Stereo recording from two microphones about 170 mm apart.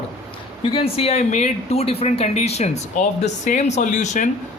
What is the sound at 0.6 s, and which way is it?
Speech, 35° left (ahead or behind).